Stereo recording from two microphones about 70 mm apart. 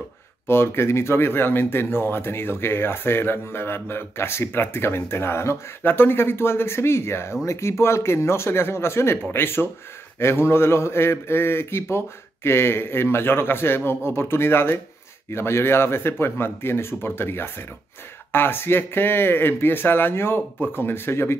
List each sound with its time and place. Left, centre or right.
0.5 s speech: left